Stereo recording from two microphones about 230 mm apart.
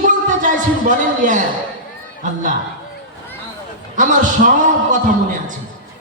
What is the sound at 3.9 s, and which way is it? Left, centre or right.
A man's voice, right.